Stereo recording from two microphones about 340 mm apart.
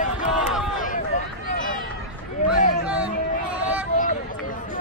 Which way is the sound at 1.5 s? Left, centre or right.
Left.